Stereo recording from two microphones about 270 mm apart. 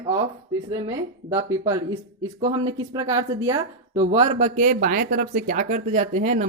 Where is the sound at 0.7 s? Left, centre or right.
Centre; by 6.5 s right.